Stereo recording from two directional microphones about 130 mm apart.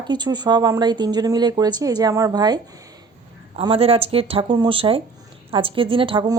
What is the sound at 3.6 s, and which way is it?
Speech, 45° right (ahead or behind).